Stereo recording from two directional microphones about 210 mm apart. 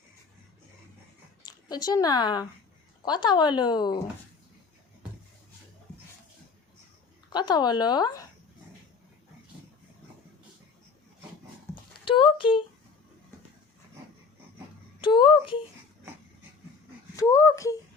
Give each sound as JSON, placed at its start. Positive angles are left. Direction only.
{"t": 1.5, "sound": "a woman's voice", "side_deg": 20}
{"t": 7.3, "sound": "speech", "side_deg": 20}
{"t": 11.7, "sound": "a sound", "side_deg": 25}
{"t": 15.0, "sound": "a child's voice", "side_deg": 20}
{"t": 17.2, "sound": "speech", "side_deg": 15}